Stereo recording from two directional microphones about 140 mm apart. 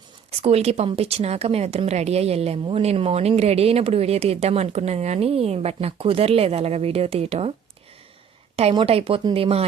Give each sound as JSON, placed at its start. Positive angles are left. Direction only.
{"t": 0.3, "sound": "a woman's voice", "side_deg": -45}
{"t": 8.7, "sound": "speech", "side_deg": -30}